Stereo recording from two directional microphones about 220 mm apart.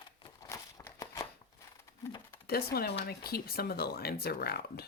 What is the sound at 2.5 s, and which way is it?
Speech, 45° left (ahead or behind).